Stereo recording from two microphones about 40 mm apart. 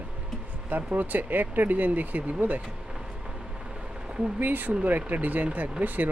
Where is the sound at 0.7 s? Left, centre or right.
Right.